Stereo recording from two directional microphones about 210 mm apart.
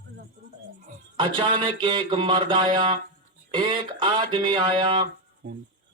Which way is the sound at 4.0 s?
20° right (ahead or behind).